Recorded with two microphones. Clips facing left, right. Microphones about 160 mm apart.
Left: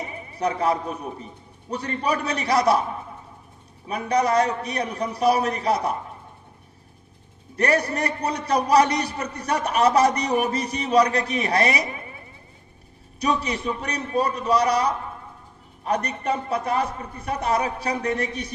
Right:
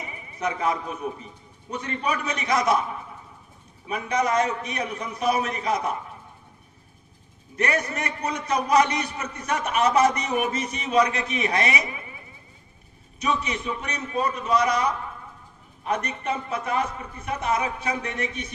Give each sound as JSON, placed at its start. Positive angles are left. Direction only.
{"t": 0.3, "sound": "a man's voice", "side_deg": 35}
{"t": 3.8, "sound": "a man's voice", "side_deg": 35}
{"t": 7.5, "sound": "a man's voice", "side_deg": 35}
{"t": 13.1, "sound": "a man's voice", "side_deg": 35}